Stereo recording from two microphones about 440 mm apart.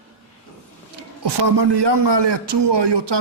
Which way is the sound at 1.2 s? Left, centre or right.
Right.